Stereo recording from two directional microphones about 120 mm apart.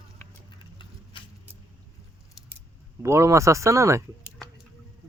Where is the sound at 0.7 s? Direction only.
45° left (ahead or behind).